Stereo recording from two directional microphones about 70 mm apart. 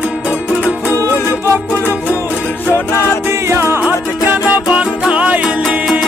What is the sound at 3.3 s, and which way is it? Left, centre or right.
Music, right.